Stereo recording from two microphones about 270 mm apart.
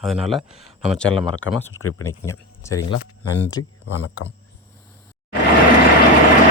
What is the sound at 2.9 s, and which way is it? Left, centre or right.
Speech, left.